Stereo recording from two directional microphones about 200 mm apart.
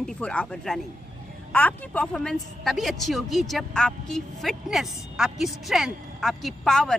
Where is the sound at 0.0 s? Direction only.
5° left (ahead or behind).